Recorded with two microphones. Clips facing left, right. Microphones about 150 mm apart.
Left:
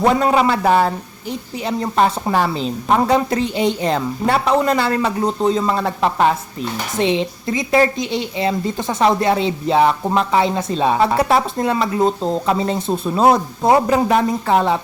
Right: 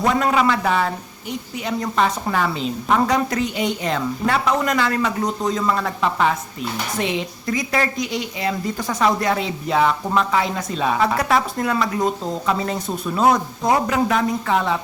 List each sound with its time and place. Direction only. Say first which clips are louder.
0.0 s a man's voice: left 3 dB; 30° left (ahead or behind)